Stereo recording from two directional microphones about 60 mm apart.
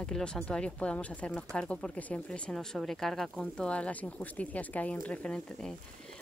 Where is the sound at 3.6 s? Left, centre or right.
Centre.